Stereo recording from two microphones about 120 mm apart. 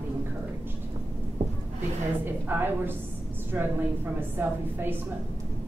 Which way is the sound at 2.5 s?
15° right (ahead or behind).